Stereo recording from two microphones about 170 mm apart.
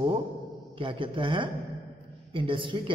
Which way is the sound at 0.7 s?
30° right (ahead or behind).